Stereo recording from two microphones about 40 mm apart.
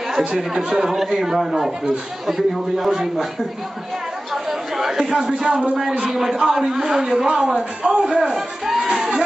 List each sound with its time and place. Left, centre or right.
0.1 s a sound: centre
0.4 s a man's voice: centre
4.3 s chatter: centre
5.4 s a man's voice: centre
7.5 s a man's voice: right
8.2 s speech: centre
8.9 s music: centre